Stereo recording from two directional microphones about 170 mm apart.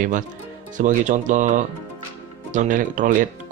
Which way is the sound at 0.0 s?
50° right (ahead or behind).